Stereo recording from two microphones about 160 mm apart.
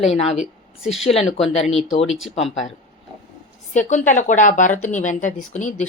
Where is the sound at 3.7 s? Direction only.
50° left (ahead or behind).